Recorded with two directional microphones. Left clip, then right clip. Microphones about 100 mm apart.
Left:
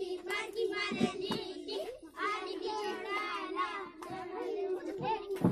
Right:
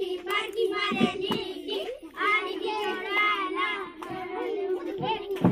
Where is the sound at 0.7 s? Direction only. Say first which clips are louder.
Right 8 dB; 20° left (ahead or behind).